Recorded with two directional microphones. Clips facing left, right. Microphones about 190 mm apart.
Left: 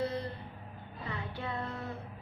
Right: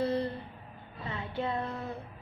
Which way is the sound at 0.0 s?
30° right (ahead or behind).